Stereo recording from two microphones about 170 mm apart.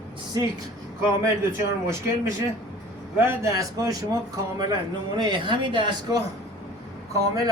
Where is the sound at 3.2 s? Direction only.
15° right (ahead or behind).